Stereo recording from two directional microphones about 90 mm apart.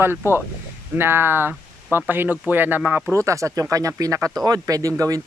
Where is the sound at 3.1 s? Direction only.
35° right (ahead or behind).